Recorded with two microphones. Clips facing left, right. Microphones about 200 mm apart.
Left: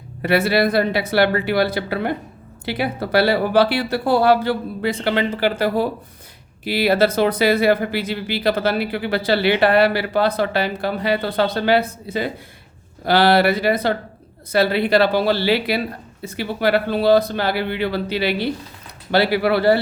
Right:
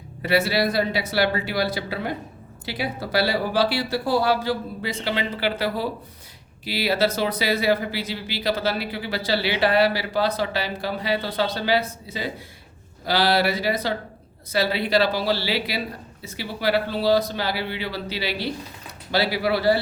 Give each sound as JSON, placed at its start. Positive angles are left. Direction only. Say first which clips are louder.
{"t": 0.2, "sound": "speech", "louder": "left 4 dB", "side_deg": 55}